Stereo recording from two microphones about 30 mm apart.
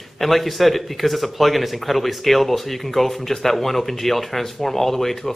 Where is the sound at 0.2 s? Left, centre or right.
Centre.